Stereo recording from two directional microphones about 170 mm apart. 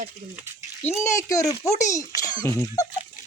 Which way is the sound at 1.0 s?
20° left (ahead or behind).